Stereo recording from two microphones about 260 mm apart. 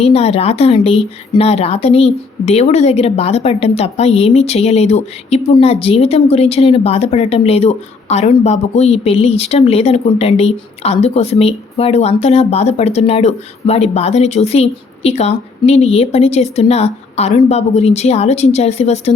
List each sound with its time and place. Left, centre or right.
0.0 s a woman's voice: left